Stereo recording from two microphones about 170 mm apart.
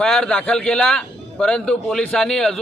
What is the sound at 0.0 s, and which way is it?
A man's voice, 5° left (ahead or behind).